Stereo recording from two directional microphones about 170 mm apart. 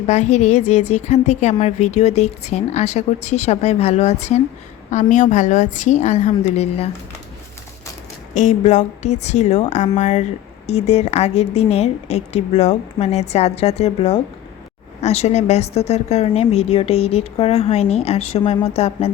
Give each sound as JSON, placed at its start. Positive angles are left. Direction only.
{"t": 0.1, "sound": "a woman's voice", "side_deg": 40}
{"t": 8.4, "sound": "a woman's voice", "side_deg": 45}